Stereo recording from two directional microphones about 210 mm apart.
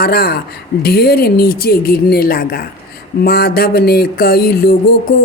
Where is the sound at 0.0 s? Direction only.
45° left (ahead or behind).